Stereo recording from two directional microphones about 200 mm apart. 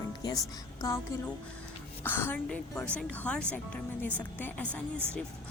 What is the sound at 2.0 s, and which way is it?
A woman's voice, 10° left (ahead or behind).